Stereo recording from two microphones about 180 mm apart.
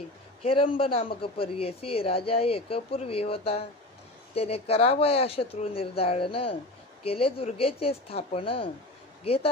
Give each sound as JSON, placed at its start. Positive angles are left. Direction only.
{"t": 0.4, "sound": "speech", "side_deg": 30}